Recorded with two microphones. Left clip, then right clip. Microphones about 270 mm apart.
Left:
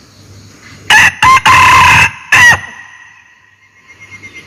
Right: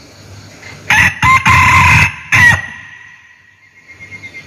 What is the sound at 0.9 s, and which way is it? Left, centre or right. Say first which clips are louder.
Chicken: left 4 dB; centre.